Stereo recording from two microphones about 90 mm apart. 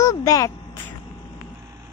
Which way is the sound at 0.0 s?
40° left (ahead or behind).